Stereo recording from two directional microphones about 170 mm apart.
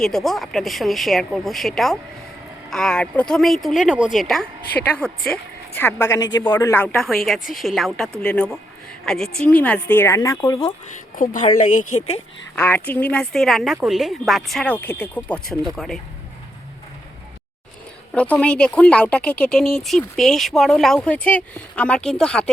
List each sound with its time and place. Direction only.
0.0 s speech: centre (ahead or behind)
5.8 s speech: 20° left (ahead or behind)
11.2 s speech: 50° left (ahead or behind)
12.5 s speech: 10° left (ahead or behind)
18.1 s speech: 5° left (ahead or behind)